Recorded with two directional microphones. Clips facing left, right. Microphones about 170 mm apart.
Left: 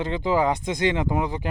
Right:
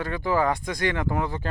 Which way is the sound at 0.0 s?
20° left (ahead or behind).